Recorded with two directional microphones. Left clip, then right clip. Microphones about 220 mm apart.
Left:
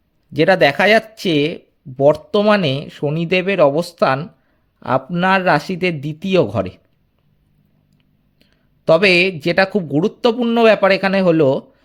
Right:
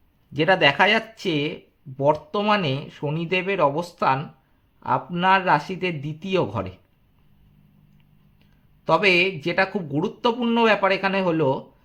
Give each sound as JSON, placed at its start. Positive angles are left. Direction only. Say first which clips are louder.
{"t": 0.3, "sound": "speech", "louder": "left 5 dB", "side_deg": 30}
{"t": 8.4, "sound": "speech", "louder": "left 4 dB", "side_deg": 30}